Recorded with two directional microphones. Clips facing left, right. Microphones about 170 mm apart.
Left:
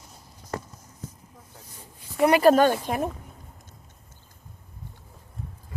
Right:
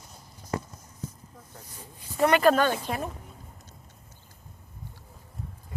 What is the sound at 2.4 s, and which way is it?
Speech, 45° left (ahead or behind).